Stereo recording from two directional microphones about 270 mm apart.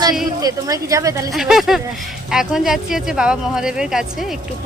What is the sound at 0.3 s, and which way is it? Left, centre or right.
Speech, centre.